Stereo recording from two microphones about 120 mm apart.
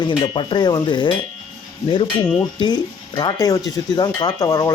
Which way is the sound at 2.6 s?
35° left (ahead or behind).